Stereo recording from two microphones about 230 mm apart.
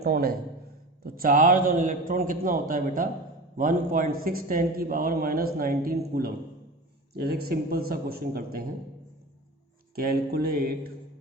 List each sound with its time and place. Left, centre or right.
0.0 s a man's voice: right
9.9 s a man's voice: right